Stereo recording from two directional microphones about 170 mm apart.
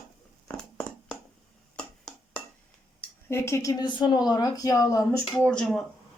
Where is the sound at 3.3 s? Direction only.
15° left (ahead or behind).